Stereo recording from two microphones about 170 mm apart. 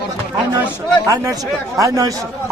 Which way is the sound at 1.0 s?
20° right (ahead or behind).